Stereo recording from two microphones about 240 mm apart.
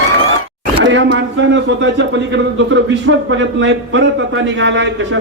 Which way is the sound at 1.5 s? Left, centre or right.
Right.